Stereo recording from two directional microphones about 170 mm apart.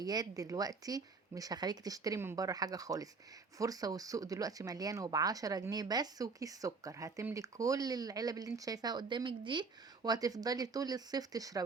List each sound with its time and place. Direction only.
0.0 s speech: 25° right (ahead or behind)